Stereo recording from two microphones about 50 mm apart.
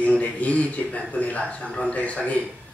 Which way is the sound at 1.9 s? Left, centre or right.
Left.